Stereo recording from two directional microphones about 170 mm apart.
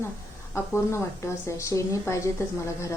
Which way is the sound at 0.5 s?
15° left (ahead or behind).